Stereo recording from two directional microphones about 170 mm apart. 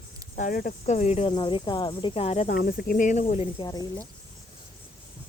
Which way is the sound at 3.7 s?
20° left (ahead or behind).